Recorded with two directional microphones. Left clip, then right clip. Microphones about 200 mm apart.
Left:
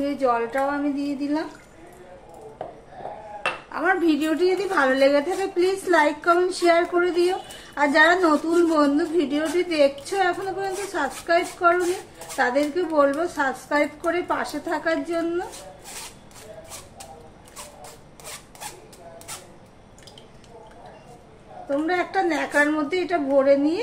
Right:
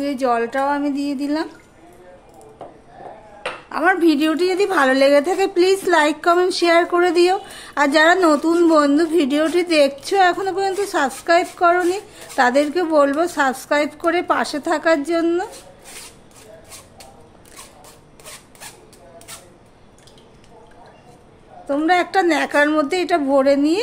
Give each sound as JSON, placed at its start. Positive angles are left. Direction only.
{"t": 0.0, "sound": "a woman's voice", "side_deg": -60}
{"t": 3.6, "sound": "a woman's voice", "side_deg": -55}
{"t": 21.6, "sound": "a woman's voice", "side_deg": -60}